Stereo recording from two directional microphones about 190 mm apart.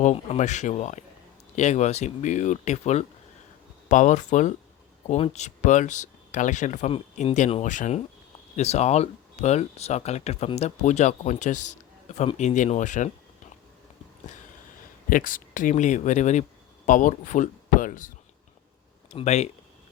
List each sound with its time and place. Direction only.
0.0 s speech: 35° left (ahead or behind)
15.1 s speech: 45° left (ahead or behind)
19.1 s speech: 35° left (ahead or behind)